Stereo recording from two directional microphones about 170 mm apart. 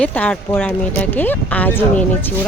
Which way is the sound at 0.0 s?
10° left (ahead or behind).